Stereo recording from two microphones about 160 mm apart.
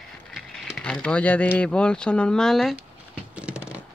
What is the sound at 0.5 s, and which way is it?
Speech, 5° left (ahead or behind).